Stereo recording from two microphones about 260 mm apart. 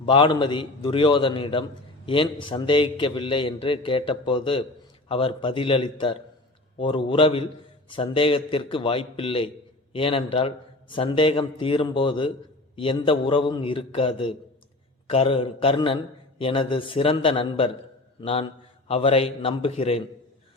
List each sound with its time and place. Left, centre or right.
0.0 s a man's voice: centre